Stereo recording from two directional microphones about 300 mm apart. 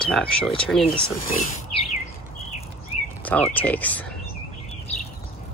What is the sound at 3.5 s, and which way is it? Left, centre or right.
Speech, centre.